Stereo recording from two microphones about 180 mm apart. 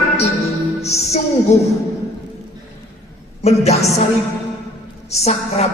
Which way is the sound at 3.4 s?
35° left (ahead or behind).